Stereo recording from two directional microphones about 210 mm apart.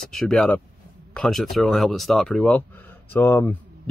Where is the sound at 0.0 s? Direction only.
Centre (ahead or behind).